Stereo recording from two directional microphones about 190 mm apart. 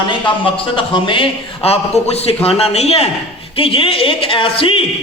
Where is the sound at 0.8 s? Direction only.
25° left (ahead or behind).